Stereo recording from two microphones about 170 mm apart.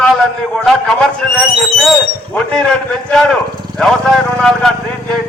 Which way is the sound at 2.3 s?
5° left (ahead or behind).